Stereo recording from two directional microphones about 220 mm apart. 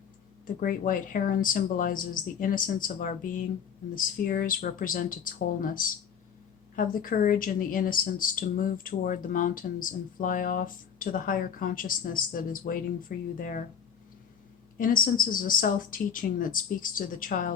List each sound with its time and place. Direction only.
0.4 s speech: 40° left (ahead or behind)
14.8 s speech: 40° left (ahead or behind)